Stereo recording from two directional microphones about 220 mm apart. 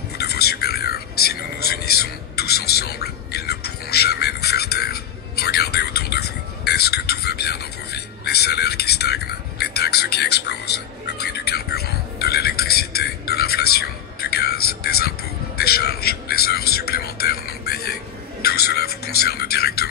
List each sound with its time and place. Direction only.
0.2 s whispering: 45° left (ahead or behind)